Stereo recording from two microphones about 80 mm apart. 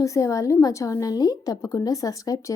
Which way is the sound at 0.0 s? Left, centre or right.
Left.